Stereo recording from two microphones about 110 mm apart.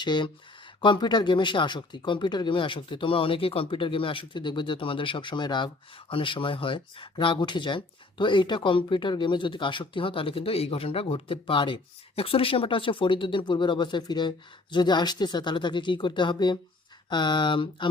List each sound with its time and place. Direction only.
0.0 s speech: 45° left (ahead or behind)